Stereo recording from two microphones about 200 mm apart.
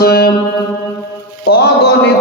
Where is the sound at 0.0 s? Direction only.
50° left (ahead or behind).